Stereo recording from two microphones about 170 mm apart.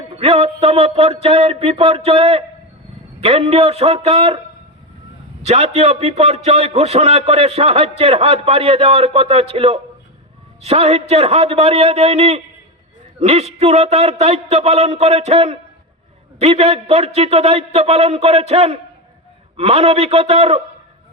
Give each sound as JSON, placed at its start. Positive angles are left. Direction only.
{"t": 0.2, "sound": "a man's voice", "side_deg": -35}
{"t": 5.5, "sound": "a man's voice", "side_deg": -40}